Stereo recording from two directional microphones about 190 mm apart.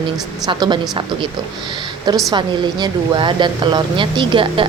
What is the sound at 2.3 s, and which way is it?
Speech, 25° right (ahead or behind).